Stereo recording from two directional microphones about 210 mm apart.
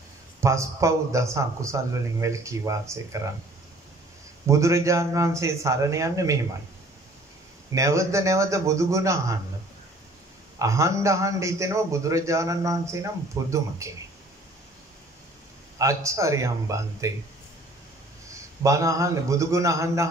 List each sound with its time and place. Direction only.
0.4 s a man's voice: 15° right (ahead or behind)
4.5 s a man's voice: 15° right (ahead or behind)
7.7 s a man's voice: 15° right (ahead or behind)
10.6 s a man's voice: 15° right (ahead or behind)
15.8 s a man's voice: 15° right (ahead or behind)
18.3 s a man's voice: 15° right (ahead or behind)